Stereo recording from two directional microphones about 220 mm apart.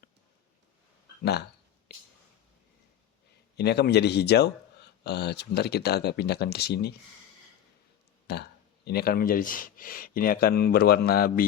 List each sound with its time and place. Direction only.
1.2 s speech: 50° left (ahead or behind)
3.6 s speech: 50° left (ahead or behind)
8.3 s speech: 45° left (ahead or behind)